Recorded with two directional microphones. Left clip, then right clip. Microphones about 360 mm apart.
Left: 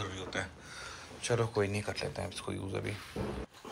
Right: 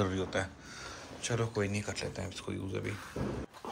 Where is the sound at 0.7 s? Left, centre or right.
Centre.